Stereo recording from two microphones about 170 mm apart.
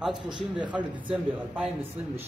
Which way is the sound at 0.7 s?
10° right (ahead or behind).